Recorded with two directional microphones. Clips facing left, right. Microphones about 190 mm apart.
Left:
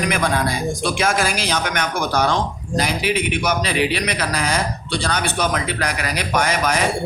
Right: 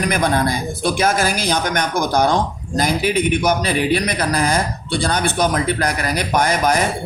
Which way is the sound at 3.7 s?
45° right (ahead or behind).